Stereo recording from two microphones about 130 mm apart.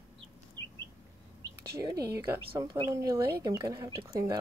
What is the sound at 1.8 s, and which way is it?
Speech, 30° right (ahead or behind).